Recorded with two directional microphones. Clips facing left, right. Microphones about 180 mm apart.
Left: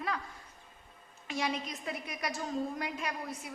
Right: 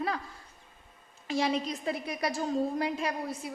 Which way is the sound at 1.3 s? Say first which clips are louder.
Right 6 dB; 30° right (ahead or behind).